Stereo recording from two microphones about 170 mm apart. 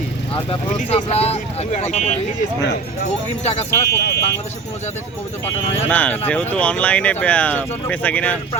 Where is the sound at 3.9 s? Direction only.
70° left (ahead or behind).